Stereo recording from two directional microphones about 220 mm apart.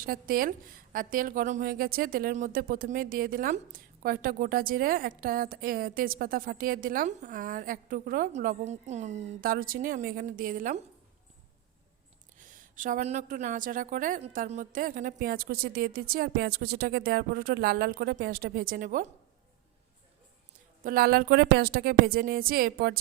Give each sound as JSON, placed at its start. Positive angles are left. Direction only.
{"t": 0.0, "sound": "a woman's voice", "side_deg": -40}
{"t": 12.4, "sound": "a woman's voice", "side_deg": -35}
{"t": 20.8, "sound": "speech", "side_deg": -40}